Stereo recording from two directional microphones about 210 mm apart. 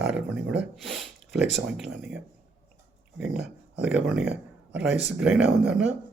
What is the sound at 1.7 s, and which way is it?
Speech, centre (ahead or behind).